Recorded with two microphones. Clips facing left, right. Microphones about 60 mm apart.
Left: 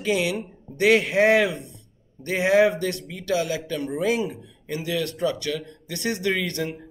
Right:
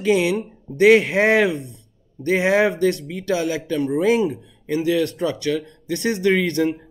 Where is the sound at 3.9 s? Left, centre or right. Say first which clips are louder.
Right 6 dB; right.